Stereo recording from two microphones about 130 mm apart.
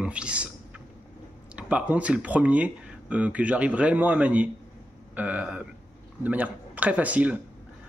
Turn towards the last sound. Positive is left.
turn(degrees=-10)  # may be behind; listen again after turning